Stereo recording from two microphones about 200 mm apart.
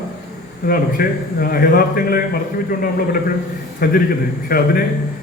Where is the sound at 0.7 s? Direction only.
45° left (ahead or behind).